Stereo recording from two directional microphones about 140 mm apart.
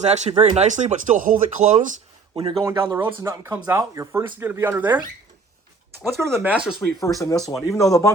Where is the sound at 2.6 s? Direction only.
20° right (ahead or behind).